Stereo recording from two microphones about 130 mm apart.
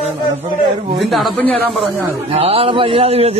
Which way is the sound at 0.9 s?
Centre (ahead or behind).